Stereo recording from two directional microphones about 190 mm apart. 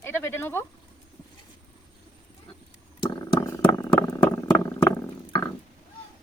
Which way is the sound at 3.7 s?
15° left (ahead or behind).